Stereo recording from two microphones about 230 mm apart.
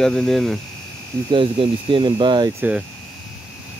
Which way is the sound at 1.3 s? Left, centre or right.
Right.